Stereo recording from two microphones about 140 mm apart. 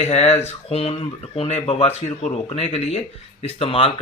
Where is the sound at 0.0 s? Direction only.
50° left (ahead or behind).